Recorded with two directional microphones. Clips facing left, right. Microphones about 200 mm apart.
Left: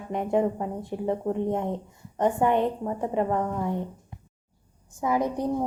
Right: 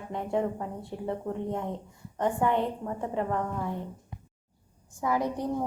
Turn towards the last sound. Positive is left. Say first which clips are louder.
# left 3 dB
turn(degrees=20)  # may be behind; listen again after turning